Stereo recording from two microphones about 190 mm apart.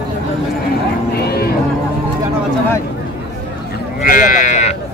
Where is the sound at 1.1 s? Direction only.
55° left (ahead or behind).